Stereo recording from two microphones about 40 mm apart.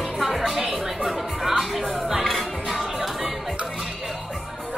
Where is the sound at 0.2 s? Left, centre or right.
Centre.